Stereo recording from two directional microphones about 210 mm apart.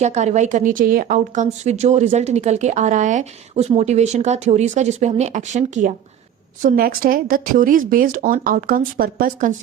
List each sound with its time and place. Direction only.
0.0 s a woman's voice: 35° right (ahead or behind)